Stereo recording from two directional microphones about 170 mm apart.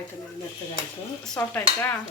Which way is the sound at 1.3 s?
10° left (ahead or behind).